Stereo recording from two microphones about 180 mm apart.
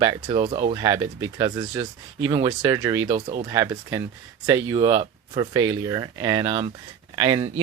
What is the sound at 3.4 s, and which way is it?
Speech, 20° right (ahead or behind).